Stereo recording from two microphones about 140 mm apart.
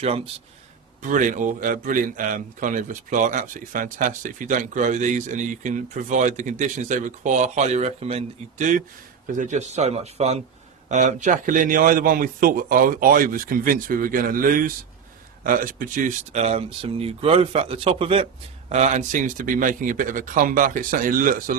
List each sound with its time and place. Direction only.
1.0 s a man's voice: 70° right (ahead or behind); by 14.7 s 90° right
15.4 s speech: 75° right (ahead or behind); by 18.3 s 40° right (ahead or behind)
18.7 s speech: 55° right (ahead or behind); by 21.5 s 80° right